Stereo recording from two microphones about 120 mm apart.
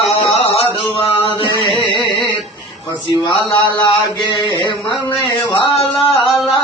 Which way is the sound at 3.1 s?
40° left (ahead or behind).